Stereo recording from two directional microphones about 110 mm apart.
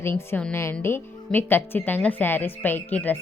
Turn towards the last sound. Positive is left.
turn(degrees=15)  # may be behind; listen again after turning